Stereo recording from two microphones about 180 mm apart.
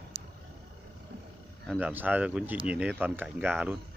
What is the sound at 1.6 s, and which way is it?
Speech, 5° right (ahead or behind).